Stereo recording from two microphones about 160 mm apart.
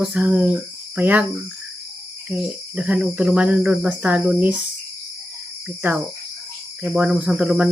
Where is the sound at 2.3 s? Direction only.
5° right (ahead or behind).